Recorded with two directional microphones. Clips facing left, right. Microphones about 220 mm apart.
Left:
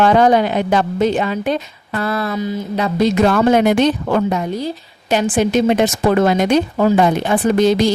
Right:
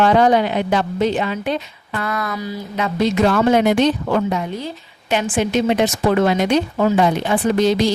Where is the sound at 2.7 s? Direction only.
40° left (ahead or behind).